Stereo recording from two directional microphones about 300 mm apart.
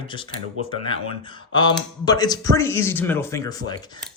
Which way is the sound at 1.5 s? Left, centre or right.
Centre.